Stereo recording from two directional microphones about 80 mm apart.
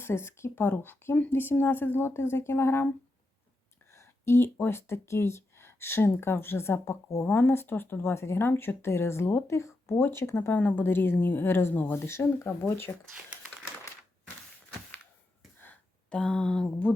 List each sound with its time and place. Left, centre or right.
0.0 s a woman's voice: left
3.9 s speech: left
10.5 s a woman's voice: centre
10.8 s a woman's voice: left
15.5 s a sound: left
16.0 s speech: centre